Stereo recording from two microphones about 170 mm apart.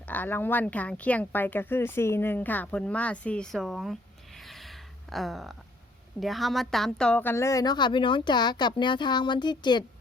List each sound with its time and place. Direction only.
0.1 s speech: 10° left (ahead or behind)
4.4 s a sound: centre (ahead or behind)
6.1 s a woman's voice: centre (ahead or behind); by 9.8 s 25° left (ahead or behind)